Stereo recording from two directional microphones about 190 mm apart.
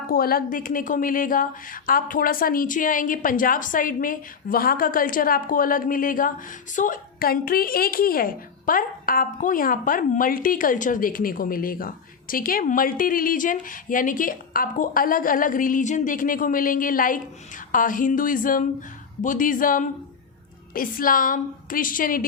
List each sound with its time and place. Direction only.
0.1 s a woman's voice: 50° left (ahead or behind)